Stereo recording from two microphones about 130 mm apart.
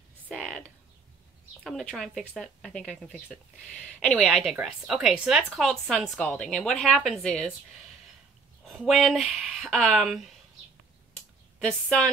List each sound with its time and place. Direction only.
0.3 s a sound: 5° left (ahead or behind)
1.6 s a woman's voice: centre (ahead or behind)
8.6 s a woman's voice: centre (ahead or behind)
11.6 s a woman's voice: 5° left (ahead or behind)